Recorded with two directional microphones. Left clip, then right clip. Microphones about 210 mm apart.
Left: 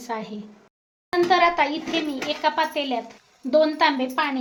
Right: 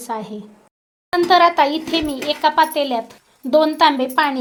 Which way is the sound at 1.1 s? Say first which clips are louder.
Right 5 dB; 35° right (ahead or behind).